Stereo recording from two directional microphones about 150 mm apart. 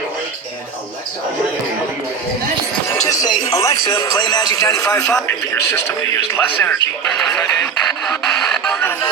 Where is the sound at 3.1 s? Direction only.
25° left (ahead or behind).